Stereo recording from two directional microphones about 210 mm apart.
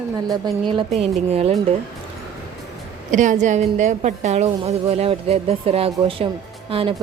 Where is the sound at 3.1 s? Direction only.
35° right (ahead or behind).